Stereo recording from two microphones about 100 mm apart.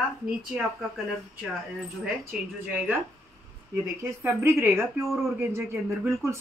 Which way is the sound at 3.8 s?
20° right (ahead or behind).